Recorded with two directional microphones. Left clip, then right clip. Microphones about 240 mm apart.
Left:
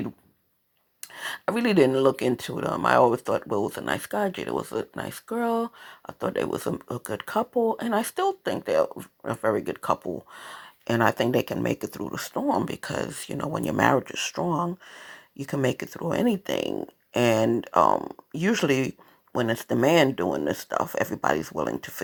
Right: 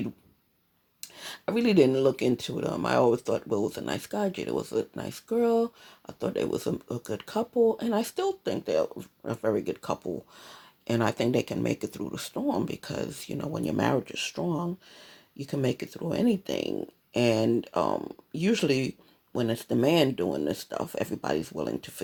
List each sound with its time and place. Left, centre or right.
1.0 s speech: centre
15.5 s speech: centre